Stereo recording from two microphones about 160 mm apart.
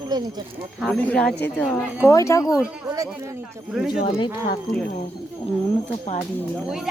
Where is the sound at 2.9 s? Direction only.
25° right (ahead or behind).